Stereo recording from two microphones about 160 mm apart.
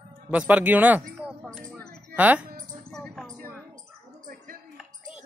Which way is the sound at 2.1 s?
10° right (ahead or behind).